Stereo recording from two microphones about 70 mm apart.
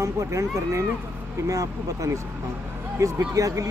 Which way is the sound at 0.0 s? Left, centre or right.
Right.